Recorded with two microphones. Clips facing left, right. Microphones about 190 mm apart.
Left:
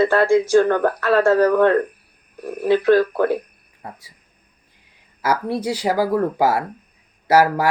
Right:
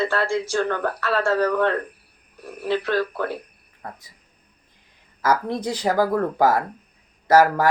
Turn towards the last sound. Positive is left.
turn(degrees=10)  # may be behind; listen again after turning